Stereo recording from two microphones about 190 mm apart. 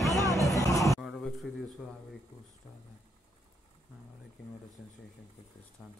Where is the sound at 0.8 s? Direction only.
Centre (ahead or behind).